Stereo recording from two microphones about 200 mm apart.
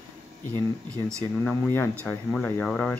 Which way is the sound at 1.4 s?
10° left (ahead or behind).